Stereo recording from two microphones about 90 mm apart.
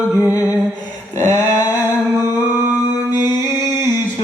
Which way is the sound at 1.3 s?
45° left (ahead or behind).